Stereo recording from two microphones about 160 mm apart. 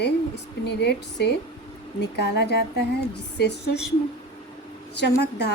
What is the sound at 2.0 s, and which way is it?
A woman's voice, 90° left.